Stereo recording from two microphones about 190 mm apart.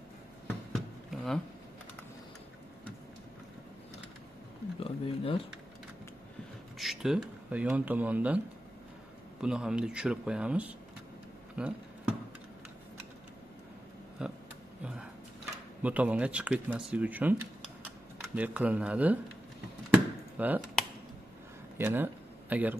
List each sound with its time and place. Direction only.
0.7 s a sound: centre (ahead or behind)
4.7 s speech: 30° left (ahead or behind)
6.8 s speech: centre (ahead or behind)
9.4 s speech: 5° right (ahead or behind)
14.2 s a sound: 5° right (ahead or behind)
15.8 s speech: 5° right (ahead or behind)
19.9 s chop: 10° right (ahead or behind)
21.7 s speech: 10° right (ahead or behind)